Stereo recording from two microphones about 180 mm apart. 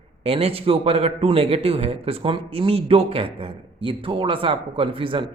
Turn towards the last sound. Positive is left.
turn(degrees=-30)  # may be behind; listen again after turning